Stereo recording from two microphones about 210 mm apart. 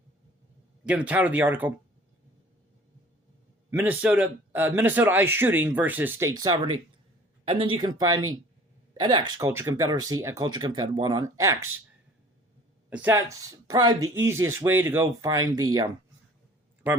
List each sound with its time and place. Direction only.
0.9 s a man's voice: 5° right (ahead or behind)
3.7 s a man's voice: 10° right (ahead or behind)
12.9 s a man's voice: 10° right (ahead or behind)